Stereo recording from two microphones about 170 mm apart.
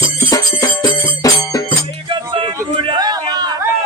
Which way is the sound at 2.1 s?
30° right (ahead or behind).